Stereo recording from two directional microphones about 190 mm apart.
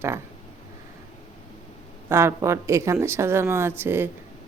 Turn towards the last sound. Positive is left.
turn(degrees=-10)  # may be behind; listen again after turning